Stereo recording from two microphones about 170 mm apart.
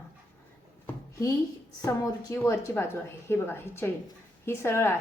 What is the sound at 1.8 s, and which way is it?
A woman's voice, 20° left (ahead or behind).